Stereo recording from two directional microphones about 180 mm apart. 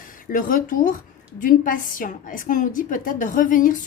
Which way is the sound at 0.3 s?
50° left (ahead or behind).